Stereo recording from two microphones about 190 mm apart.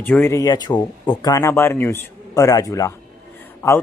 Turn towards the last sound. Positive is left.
turn(degrees=15)  # may be behind; listen again after turning